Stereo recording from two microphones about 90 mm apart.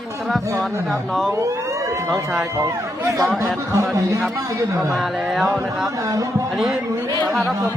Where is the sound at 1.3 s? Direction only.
35° right (ahead or behind).